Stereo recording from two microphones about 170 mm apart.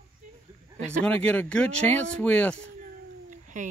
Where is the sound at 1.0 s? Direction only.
5° left (ahead or behind).